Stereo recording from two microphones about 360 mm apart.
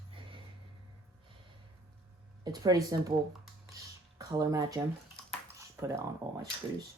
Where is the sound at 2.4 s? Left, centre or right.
Centre.